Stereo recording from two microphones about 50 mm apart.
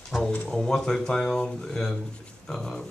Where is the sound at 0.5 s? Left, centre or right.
Centre.